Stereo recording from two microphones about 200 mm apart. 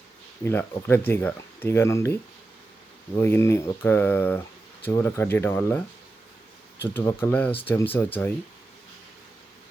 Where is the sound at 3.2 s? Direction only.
10° left (ahead or behind).